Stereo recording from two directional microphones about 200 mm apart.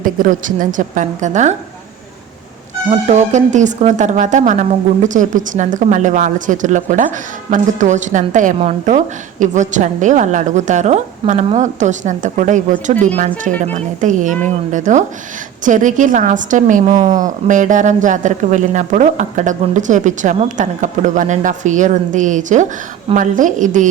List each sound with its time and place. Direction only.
0.0 s a woman's voice: 40° right (ahead or behind)
3.1 s a woman's voice: 35° right (ahead or behind)